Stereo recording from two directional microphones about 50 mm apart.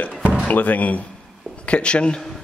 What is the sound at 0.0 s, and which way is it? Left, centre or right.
Music, left.